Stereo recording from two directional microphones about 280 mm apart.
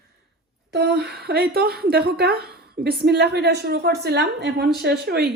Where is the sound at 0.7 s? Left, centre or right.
Right.